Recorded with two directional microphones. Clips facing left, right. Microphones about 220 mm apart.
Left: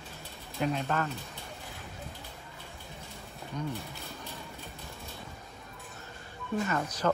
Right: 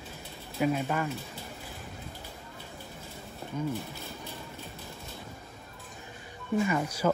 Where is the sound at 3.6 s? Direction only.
Centre (ahead or behind).